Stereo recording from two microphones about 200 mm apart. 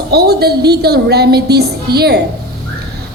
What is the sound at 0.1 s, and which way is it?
A woman's voice, 55° right (ahead or behind).